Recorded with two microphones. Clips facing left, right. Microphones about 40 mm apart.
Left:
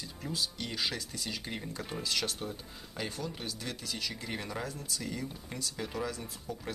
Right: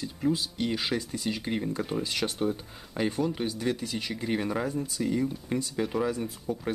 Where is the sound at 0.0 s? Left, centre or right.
Centre.